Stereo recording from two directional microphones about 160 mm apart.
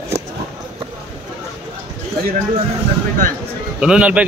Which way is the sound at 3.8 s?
5° right (ahead or behind).